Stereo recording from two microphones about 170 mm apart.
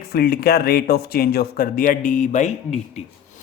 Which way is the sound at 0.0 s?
65° left (ahead or behind).